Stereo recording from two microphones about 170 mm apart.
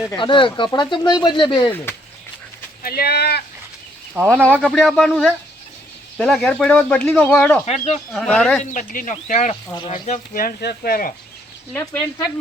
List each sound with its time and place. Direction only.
0.1 s speech: 30° left (ahead or behind)
1.7 s speech: 15° left (ahead or behind)
2.8 s speech: 65° left (ahead or behind)
4.2 s speech: 15° right (ahead or behind)
4.5 s speech: centre (ahead or behind)
7.6 s speech: 40° left (ahead or behind)
8.1 s speech: 5° left (ahead or behind)
8.7 s speech: 50° left (ahead or behind)